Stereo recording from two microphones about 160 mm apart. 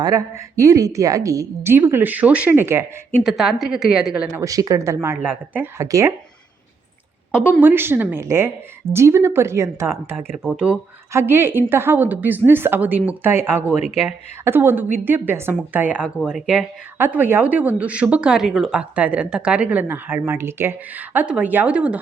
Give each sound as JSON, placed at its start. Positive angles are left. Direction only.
{"t": 0.0, "sound": "a woman's voice", "side_deg": -20}
{"t": 3.2, "sound": "a woman's voice", "side_deg": -5}
{"t": 4.4, "sound": "a woman's voice", "side_deg": -20}
{"t": 7.6, "sound": "a woman's voice", "side_deg": -15}